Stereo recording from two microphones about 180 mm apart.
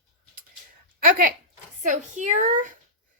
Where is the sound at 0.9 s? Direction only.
50° right (ahead or behind).